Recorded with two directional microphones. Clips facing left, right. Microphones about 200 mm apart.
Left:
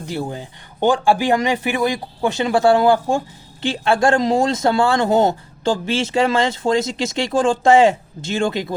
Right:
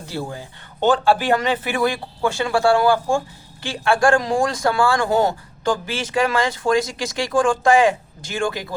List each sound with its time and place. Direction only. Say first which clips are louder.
0.0 s speech: left 3 dB; 20° left (ahead or behind)